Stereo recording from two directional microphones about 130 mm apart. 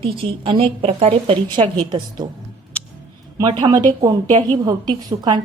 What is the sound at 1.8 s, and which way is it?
Speech, 35° right (ahead or behind).